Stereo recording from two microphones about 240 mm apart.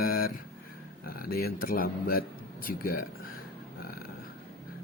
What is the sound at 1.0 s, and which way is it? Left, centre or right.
Speech, left.